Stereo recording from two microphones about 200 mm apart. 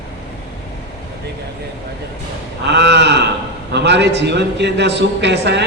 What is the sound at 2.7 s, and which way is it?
A man's voice, 60° right (ahead or behind).